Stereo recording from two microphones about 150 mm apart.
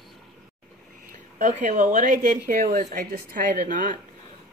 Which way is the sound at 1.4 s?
55° right (ahead or behind).